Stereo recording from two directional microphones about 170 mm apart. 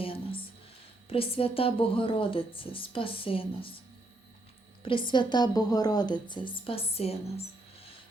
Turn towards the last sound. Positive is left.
turn(degrees=35)  # may be behind; listen again after turning